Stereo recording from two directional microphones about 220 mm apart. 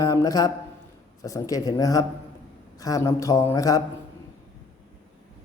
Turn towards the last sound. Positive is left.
turn(degrees=15)  # may be behind; listen again after turning